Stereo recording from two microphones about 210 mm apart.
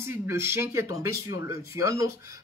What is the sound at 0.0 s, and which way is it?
Speech, 10° right (ahead or behind).